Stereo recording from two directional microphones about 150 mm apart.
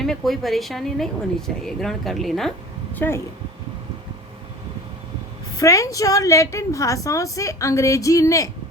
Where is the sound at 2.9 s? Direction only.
15° left (ahead or behind).